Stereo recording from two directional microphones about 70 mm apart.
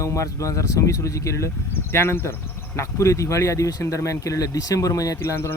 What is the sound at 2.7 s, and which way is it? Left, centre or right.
Speech, left.